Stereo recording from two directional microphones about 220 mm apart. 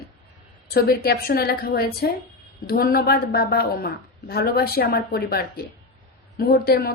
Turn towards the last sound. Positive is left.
turn(degrees=45)  # may be behind; listen again after turning